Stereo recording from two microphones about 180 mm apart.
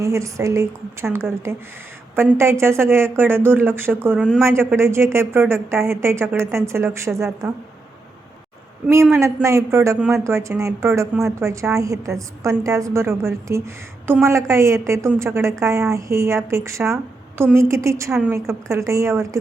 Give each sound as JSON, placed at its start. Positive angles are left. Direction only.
{"t": 0.0, "sound": "a woman's voice", "side_deg": -15}
{"t": 9.0, "sound": "a woman's voice", "side_deg": -15}